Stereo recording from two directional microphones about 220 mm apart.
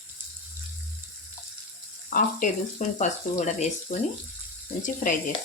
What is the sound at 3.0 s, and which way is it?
Speech, 30° left (ahead or behind).